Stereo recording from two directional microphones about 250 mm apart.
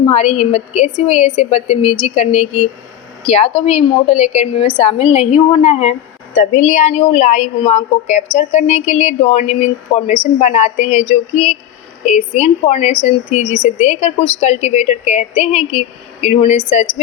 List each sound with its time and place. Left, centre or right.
0.1 s a woman's voice: left